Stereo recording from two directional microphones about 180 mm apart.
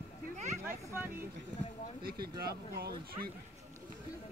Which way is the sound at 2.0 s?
60° right (ahead or behind).